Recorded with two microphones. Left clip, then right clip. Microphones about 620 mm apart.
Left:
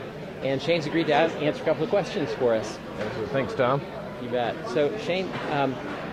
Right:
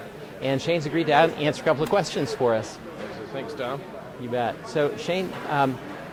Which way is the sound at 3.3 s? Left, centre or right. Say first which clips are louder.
Left 7 dB; left.